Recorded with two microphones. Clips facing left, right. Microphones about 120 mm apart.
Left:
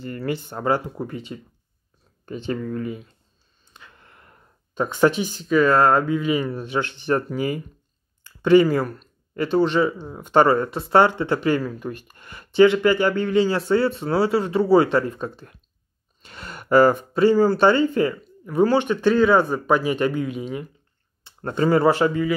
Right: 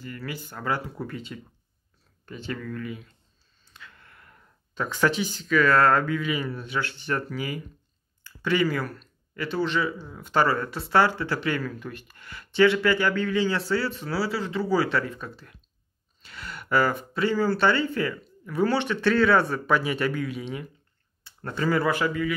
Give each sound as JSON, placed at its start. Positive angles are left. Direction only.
{"t": 0.0, "sound": "speech", "side_deg": 30}
{"t": 3.7, "sound": "a sound", "side_deg": 20}
{"t": 5.2, "sound": "speech", "side_deg": 45}
{"t": 5.6, "sound": "speech", "side_deg": 20}
{"t": 7.3, "sound": "speech", "side_deg": 30}
{"t": 8.2, "sound": "a sound", "side_deg": 25}
{"t": 8.6, "sound": "speech", "side_deg": 25}
{"t": 12.1, "sound": "a sound", "side_deg": 20}
{"t": 12.5, "sound": "speech", "side_deg": 20}
{"t": 16.3, "sound": "gasp", "side_deg": 25}
{"t": 16.6, "sound": "speech", "side_deg": 40}
{"t": 17.1, "sound": "speech", "side_deg": 20}
{"t": 19.8, "sound": "speech", "side_deg": 30}